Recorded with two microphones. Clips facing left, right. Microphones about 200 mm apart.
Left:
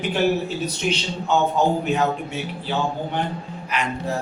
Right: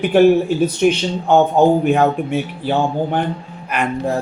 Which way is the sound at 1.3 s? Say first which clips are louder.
Right 7 dB; 55° right (ahead or behind).